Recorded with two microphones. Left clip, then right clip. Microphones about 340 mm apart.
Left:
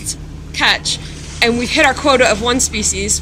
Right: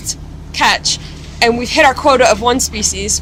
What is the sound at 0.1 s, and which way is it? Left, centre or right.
Vehicle, right.